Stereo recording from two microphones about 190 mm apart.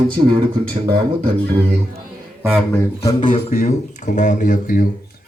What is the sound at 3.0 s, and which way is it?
Speech, 20° left (ahead or behind).